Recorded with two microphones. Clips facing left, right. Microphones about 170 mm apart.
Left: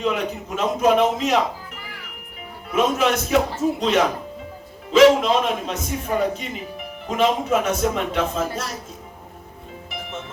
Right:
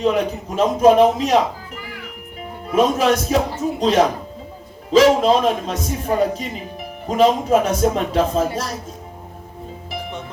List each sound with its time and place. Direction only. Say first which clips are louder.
0.0 s a man's voice: right 5 dB; 35° right (ahead or behind)
2.7 s a man's voice: right 4 dB; 35° right (ahead or behind)